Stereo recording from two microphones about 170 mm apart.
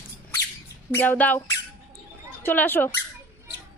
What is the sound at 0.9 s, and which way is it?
Speech, 10° left (ahead or behind).